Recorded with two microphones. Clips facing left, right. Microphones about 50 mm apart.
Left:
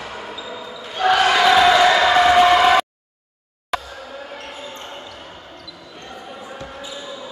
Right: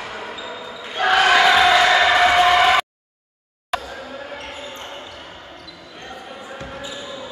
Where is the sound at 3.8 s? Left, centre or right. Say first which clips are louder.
Right 2 dB; centre.